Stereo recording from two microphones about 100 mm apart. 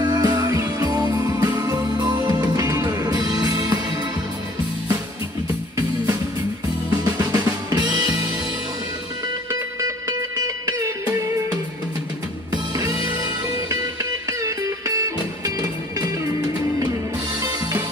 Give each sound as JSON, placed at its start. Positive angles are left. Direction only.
{"t": 0.0, "sound": "music", "side_deg": -45}
{"t": 7.1, "sound": "drum", "side_deg": -40}
{"t": 9.5, "sound": "music", "side_deg": -35}
{"t": 12.7, "sound": "music", "side_deg": -40}
{"t": 14.4, "sound": "music", "side_deg": -35}